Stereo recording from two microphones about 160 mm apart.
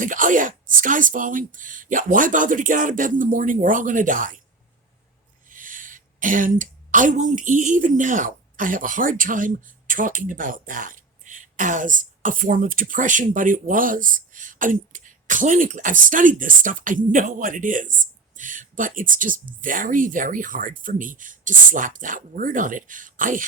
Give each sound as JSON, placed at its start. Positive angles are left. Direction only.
{"t": 0.0, "sound": "speech", "side_deg": -55}
{"t": 5.5, "sound": "a woman's voice", "side_deg": -55}